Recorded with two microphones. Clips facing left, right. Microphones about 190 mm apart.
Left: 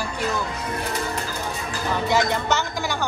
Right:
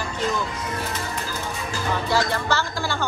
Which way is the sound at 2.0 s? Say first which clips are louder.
Left 2 dB; 20° left (ahead or behind).